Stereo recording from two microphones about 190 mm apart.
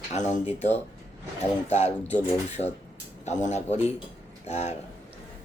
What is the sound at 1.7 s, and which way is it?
Speech, 35° left (ahead or behind).